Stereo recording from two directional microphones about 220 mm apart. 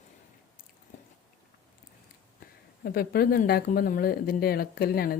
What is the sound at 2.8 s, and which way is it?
Speech, 45° left (ahead or behind).